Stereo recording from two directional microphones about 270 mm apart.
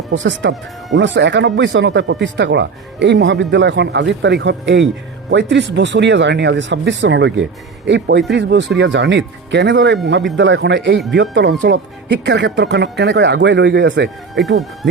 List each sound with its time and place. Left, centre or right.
0.1 s speech: right